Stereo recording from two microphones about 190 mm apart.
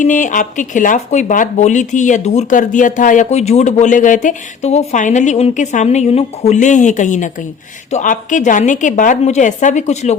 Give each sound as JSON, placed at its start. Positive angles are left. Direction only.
{"t": 0.0, "sound": "speech", "side_deg": 40}